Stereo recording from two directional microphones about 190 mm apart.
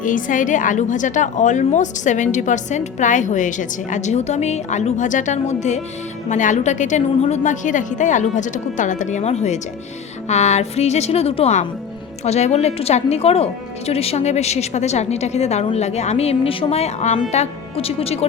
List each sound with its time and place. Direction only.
0.0 s a woman's voice: 45° left (ahead or behind)